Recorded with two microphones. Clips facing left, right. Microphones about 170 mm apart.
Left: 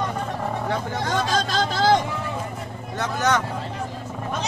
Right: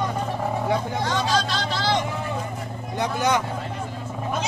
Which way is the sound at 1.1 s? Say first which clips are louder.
Left 1 dB; 50° left (ahead or behind).